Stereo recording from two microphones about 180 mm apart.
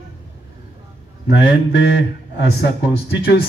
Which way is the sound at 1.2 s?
70° left (ahead or behind).